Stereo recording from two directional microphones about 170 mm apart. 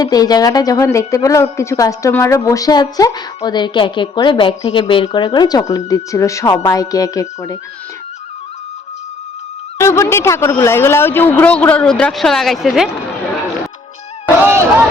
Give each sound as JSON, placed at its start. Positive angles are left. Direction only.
{"t": 0.0, "sound": "a woman's voice", "side_deg": 20}
{"t": 9.7, "sound": "speech", "side_deg": 15}